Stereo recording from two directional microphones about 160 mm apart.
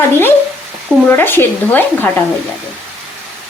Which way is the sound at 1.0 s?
10° left (ahead or behind).